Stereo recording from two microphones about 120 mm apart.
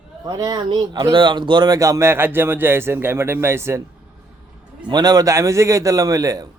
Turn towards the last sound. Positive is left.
turn(degrees=-30)  # may be behind; listen again after turning